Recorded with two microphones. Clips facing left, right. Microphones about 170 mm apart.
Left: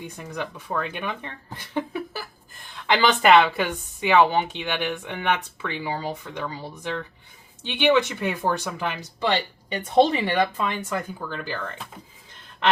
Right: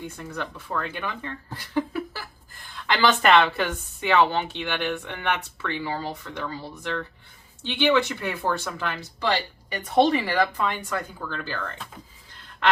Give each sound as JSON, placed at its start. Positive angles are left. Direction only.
{"t": 0.3, "sound": "a woman's voice", "side_deg": 15}